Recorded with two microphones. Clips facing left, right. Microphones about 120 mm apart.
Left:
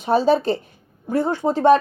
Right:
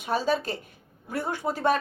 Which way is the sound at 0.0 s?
40° left (ahead or behind).